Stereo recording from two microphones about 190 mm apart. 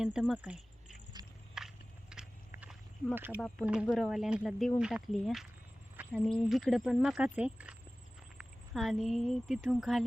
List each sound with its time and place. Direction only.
0.0 s speech: 5° right (ahead or behind)
1.2 s a sound: 20° right (ahead or behind)
1.5 s walk: 5° right (ahead or behind)
3.3 s speech: 5° left (ahead or behind)